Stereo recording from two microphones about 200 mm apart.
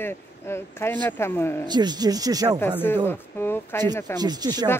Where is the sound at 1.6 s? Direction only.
20° right (ahead or behind).